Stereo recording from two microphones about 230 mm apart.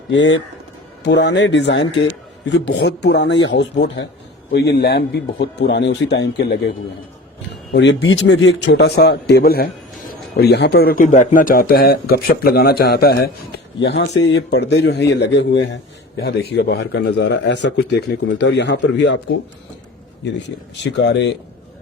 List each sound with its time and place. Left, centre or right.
0.1 s a man's voice: left
20.9 s a man's voice: left